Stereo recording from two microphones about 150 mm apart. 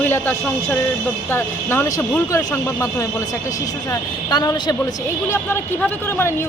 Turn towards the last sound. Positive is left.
turn(degrees=15)  # may be behind; listen again after turning